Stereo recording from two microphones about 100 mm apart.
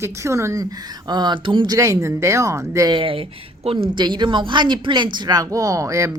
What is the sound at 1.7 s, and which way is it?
Speech, 35° right (ahead or behind).